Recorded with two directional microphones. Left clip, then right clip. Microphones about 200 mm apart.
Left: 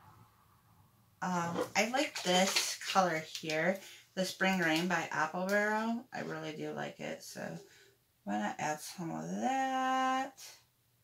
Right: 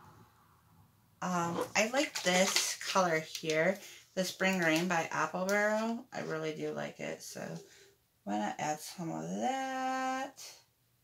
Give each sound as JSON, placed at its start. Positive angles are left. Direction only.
{"t": 1.2, "sound": "speech", "side_deg": -35}
{"t": 8.3, "sound": "speech", "side_deg": -25}